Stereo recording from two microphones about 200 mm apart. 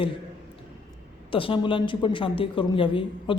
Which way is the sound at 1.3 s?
25° left (ahead or behind).